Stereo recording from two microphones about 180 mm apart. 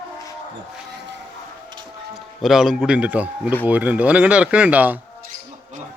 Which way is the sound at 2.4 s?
Centre (ahead or behind).